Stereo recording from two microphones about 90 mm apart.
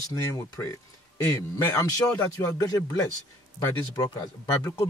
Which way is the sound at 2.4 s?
40° left (ahead or behind).